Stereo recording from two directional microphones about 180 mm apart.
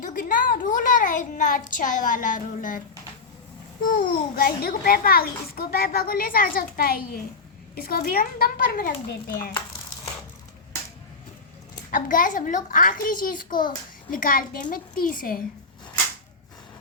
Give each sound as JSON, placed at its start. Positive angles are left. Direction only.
{"t": 0.0, "sound": "a child's voice", "side_deg": 50}
{"t": 3.8, "sound": "a child's voice", "side_deg": 55}
{"t": 11.9, "sound": "a child's voice", "side_deg": 50}